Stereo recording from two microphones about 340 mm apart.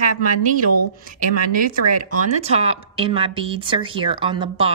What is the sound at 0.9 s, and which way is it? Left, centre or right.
Speech, right.